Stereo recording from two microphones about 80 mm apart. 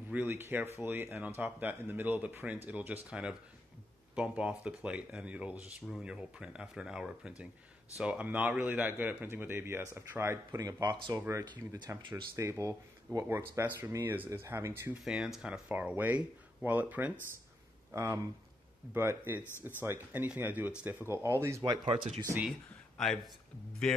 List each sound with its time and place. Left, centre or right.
0.1 s speech: right
10.9 s speech: right
11.9 s speech: right
13.4 s speech: right
15.0 s speech: centre
15.7 s speech: right
17.9 s speech: right
18.9 s speech: right
21.6 s speech: right
22.9 s speech: centre